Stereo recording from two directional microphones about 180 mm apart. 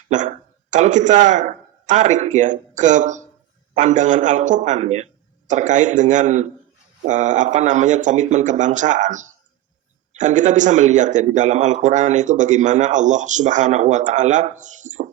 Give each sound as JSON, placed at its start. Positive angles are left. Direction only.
{"t": 0.1, "sound": "a man's voice", "side_deg": -45}